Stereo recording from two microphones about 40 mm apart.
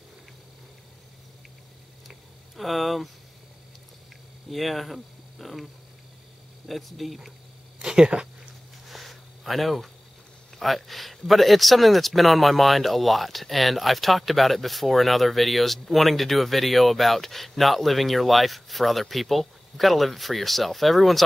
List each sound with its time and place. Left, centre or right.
2.0 s a sound: centre
4.5 s speech: centre
6.7 s speech: centre
7.8 s speech: right
8.8 s a sound: centre
10.6 s speech: centre